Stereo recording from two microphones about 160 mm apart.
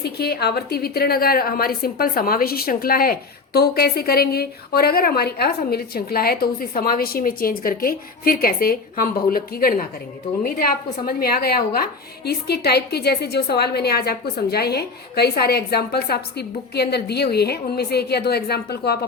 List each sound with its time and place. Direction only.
0.0 s a woman's voice: 85° left